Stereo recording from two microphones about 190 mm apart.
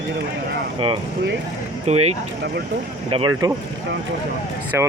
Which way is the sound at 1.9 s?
35° right (ahead or behind).